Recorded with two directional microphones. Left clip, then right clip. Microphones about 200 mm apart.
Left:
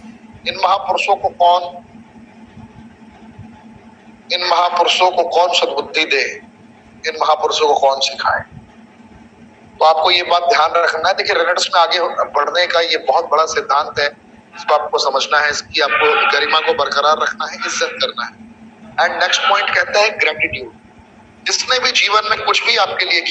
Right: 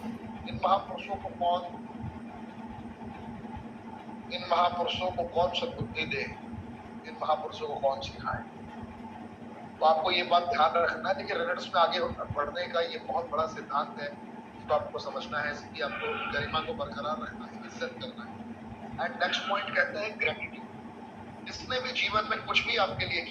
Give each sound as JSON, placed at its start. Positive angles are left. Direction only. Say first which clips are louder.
{"t": 0.4, "sound": "a man's voice", "louder": "left 13 dB", "side_deg": 45}
{"t": 4.3, "sound": "a man's voice", "louder": "left 13 dB", "side_deg": 45}
{"t": 9.7, "sound": "a man's voice", "louder": "left 13 dB", "side_deg": 45}